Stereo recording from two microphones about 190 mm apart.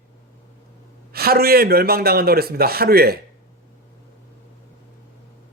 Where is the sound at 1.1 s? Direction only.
55° right (ahead or behind).